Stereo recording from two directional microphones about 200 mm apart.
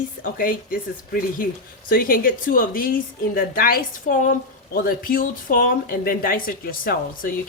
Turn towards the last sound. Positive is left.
turn(degrees=45)  # may be behind; listen again after turning